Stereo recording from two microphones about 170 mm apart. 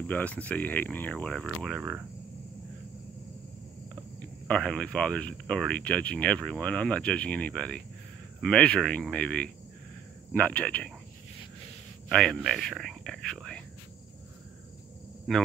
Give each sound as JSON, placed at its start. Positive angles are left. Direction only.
{"t": 0.0, "sound": "speech", "side_deg": 10}
{"t": 4.5, "sound": "speech", "side_deg": 5}
{"t": 12.1, "sound": "speech", "side_deg": 5}
{"t": 15.3, "sound": "speech", "side_deg": 0}